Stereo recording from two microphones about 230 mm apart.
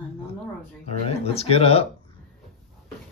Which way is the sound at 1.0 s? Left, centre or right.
Left.